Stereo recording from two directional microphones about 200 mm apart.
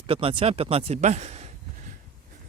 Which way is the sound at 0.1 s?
25° right (ahead or behind).